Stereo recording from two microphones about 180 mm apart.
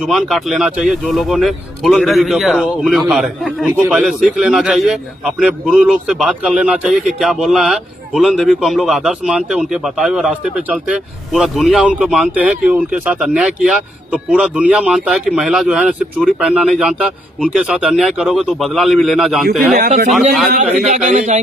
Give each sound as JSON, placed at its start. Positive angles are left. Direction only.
{"t": 0.1, "sound": "speech", "side_deg": 0}
{"t": 19.4, "sound": "speech", "side_deg": -55}
{"t": 20.5, "sound": "a man's voice", "side_deg": -45}